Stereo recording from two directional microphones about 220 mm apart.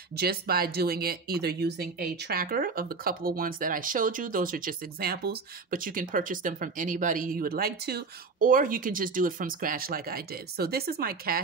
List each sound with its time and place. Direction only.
0.2 s speech: 45° right (ahead or behind)